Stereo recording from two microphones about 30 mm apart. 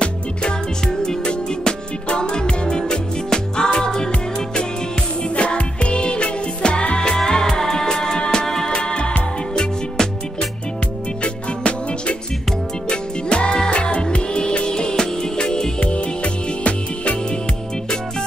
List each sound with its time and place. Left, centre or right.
0.0 s music: left
5.3 s music: left
7.2 s music: left
8.5 s music: centre
8.7 s music: left
11.2 s music: left
14.7 s music: left
16.6 s music: left